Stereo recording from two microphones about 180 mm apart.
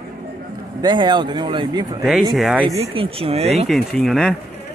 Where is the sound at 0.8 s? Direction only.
25° right (ahead or behind).